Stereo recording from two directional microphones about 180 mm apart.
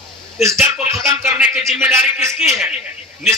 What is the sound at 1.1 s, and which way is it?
Speech, 10° right (ahead or behind).